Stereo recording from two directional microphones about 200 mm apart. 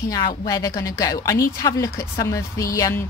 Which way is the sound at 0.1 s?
20° left (ahead or behind).